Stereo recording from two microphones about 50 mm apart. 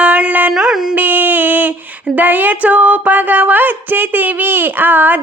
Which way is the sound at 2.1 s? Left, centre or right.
Right.